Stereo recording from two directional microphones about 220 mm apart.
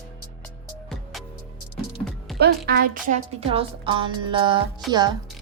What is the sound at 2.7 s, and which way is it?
Speech, 45° right (ahead or behind).